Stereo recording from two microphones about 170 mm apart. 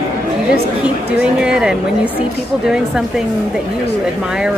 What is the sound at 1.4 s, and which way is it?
Speech, 5° right (ahead or behind).